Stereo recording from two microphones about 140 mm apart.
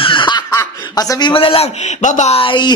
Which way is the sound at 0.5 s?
20° left (ahead or behind).